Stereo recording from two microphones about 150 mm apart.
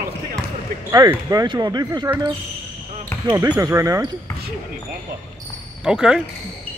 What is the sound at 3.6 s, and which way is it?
Speech, 20° right (ahead or behind).